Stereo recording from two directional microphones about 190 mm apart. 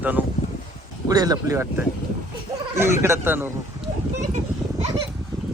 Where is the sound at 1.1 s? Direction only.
20° right (ahead or behind).